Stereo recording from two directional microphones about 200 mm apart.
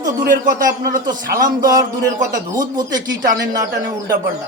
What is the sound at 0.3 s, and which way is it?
A man's voice, 45° right (ahead or behind).